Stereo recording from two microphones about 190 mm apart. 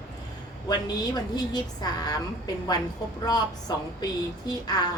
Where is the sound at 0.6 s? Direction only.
20° left (ahead or behind).